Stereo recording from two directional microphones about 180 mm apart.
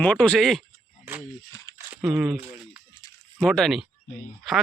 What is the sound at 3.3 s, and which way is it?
Speech, 5° left (ahead or behind).